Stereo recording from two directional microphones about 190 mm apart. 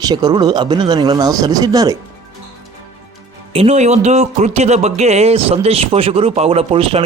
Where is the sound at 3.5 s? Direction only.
35° right (ahead or behind).